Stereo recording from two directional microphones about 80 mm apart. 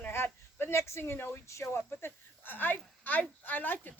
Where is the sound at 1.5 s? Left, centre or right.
Left.